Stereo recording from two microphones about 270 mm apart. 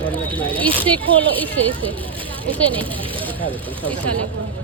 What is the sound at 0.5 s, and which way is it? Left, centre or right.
Speech, centre.